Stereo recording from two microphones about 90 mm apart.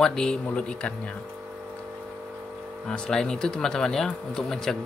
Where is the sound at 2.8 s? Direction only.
10° left (ahead or behind).